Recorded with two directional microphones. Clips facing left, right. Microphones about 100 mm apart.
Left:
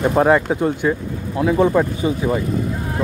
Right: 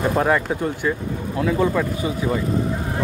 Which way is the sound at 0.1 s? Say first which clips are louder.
Left 4 dB; 25° left (ahead or behind).